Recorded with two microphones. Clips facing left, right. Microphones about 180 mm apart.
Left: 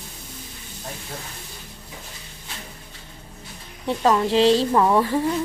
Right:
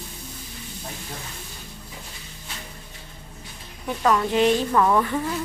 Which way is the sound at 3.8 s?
30° left (ahead or behind).